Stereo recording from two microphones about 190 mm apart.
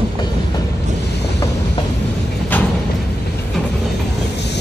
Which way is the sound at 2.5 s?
10° left (ahead or behind).